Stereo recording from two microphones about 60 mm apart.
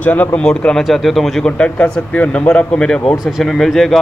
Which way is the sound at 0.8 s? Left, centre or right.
Centre.